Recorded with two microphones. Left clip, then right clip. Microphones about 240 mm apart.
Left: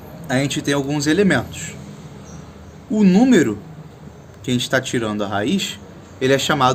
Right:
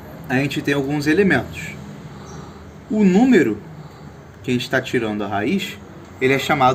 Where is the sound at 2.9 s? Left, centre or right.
Left.